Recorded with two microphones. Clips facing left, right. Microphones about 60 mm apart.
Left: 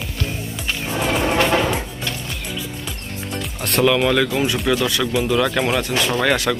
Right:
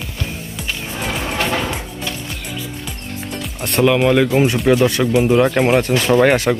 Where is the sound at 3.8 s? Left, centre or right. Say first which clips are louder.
Right 3 dB; centre.